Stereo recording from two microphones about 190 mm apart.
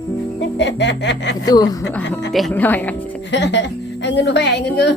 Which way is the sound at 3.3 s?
65° left (ahead or behind).